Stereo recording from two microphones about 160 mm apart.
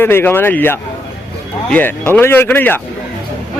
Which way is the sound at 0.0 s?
15° left (ahead or behind).